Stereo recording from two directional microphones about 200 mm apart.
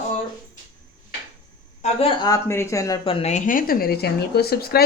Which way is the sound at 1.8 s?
30° left (ahead or behind).